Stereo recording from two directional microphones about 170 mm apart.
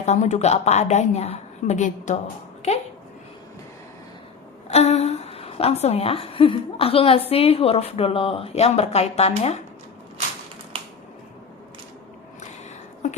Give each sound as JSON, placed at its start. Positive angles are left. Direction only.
{"t": 0.0, "sound": "a woman's voice", "side_deg": 40}
{"t": 4.7, "sound": "a woman's voice", "side_deg": 40}